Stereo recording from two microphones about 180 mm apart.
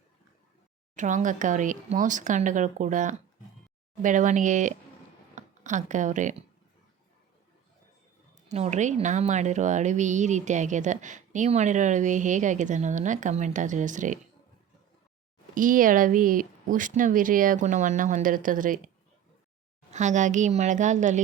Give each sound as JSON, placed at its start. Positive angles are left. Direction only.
{"t": 0.9, "sound": "a woman's voice", "side_deg": -45}
{"t": 5.3, "sound": "a sound", "side_deg": -45}
{"t": 8.4, "sound": "a woman's voice", "side_deg": -40}
{"t": 15.5, "sound": "a woman's voice", "side_deg": -50}
{"t": 19.9, "sound": "a woman's voice", "side_deg": -40}